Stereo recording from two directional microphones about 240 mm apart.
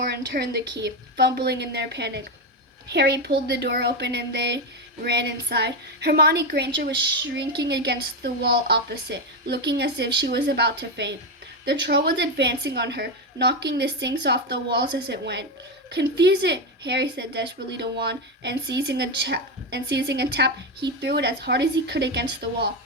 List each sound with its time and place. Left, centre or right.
0.1 s speech: right